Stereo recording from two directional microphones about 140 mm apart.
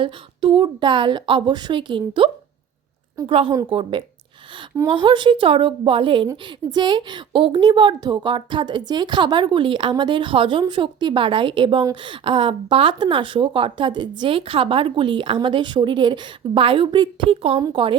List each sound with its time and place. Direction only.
0.0 s speech: 40° right (ahead or behind)